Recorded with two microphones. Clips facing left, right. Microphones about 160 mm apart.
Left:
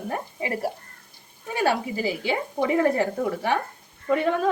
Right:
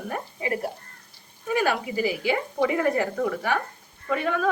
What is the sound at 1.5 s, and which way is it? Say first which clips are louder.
A woman's voice: even; 30° left (ahead or behind).